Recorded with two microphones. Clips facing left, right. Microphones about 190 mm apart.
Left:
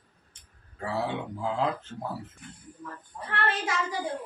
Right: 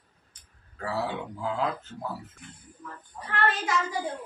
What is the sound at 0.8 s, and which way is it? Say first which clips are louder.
Speech: even; 25° left (ahead or behind).